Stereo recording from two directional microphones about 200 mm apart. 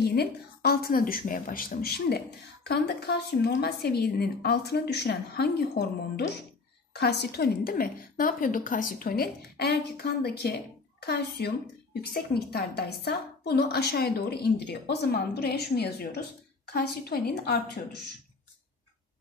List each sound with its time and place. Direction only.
0.1 s a woman's voice: 55° left (ahead or behind)